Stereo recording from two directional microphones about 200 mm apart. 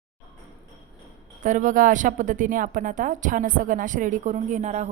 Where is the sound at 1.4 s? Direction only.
40° right (ahead or behind).